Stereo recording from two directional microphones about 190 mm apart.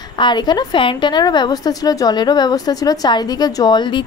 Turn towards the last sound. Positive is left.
turn(degrees=25)  # may be behind; listen again after turning